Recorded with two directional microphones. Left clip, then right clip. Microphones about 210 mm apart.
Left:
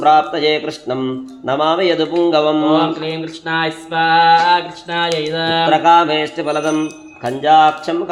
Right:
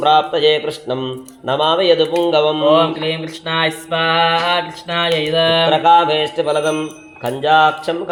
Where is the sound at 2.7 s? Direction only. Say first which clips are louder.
Right 2 dB; 10° right (ahead or behind).